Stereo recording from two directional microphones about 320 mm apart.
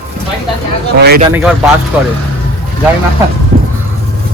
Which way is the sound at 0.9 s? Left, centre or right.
Right.